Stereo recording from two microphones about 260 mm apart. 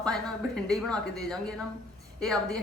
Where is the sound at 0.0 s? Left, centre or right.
Centre.